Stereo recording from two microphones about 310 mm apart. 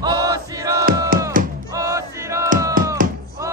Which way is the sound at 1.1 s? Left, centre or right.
Right.